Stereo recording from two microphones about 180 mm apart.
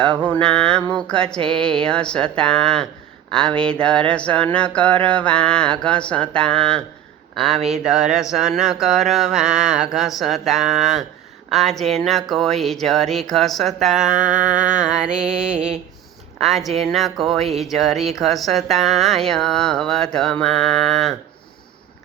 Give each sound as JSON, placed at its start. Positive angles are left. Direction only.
{"t": 0.2, "sound": "mantra", "side_deg": 10}
{"t": 0.9, "sound": "speech", "side_deg": 5}
{"t": 1.4, "sound": "speech", "side_deg": -30}
{"t": 1.8, "sound": "speech", "side_deg": 5}